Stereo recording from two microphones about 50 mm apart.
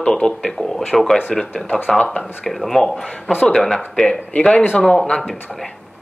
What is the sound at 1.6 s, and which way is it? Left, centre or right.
Speech, left.